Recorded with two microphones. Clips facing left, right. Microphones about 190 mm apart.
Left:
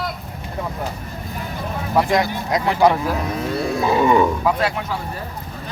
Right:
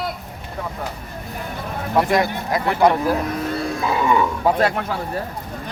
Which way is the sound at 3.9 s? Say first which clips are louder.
Left 3 dB; 25° left (ahead or behind).